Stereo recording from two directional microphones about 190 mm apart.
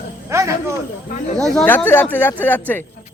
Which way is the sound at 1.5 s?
5° left (ahead or behind).